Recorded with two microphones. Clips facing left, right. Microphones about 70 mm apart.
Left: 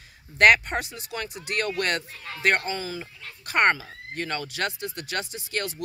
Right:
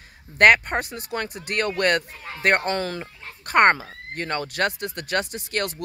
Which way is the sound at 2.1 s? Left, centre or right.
Centre.